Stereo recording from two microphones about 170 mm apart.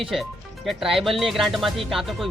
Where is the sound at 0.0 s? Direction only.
Centre (ahead or behind).